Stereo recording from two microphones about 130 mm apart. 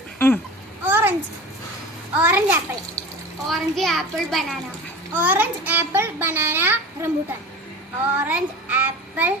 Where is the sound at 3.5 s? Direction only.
Centre (ahead or behind).